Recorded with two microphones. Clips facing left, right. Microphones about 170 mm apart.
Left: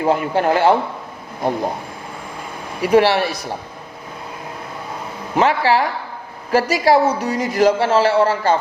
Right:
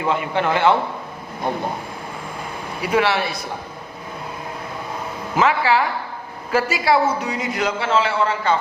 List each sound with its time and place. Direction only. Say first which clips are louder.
0.0 s speech: left 4 dB; 40° left (ahead or behind)
2.8 s speech: left 6 dB; 40° left (ahead or behind)
5.4 s speech: left 2 dB; 35° left (ahead or behind)